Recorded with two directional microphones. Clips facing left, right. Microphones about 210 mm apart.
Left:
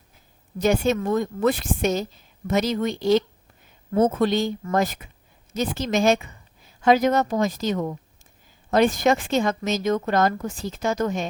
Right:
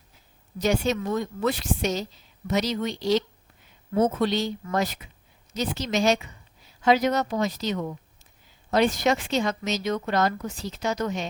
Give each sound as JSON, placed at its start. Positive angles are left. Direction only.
{"t": 0.6, "sound": "a woman's voice", "side_deg": 50}